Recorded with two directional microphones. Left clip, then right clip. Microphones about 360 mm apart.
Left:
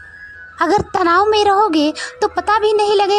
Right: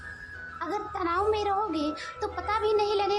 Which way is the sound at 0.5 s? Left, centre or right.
Left.